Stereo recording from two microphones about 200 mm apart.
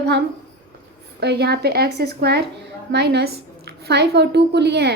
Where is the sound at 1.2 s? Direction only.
55° right (ahead or behind).